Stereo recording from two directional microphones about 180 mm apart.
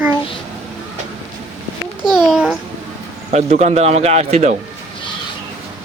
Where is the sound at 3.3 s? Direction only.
35° right (ahead or behind).